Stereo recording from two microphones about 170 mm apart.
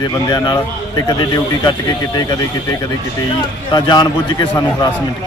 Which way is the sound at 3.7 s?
25° left (ahead or behind).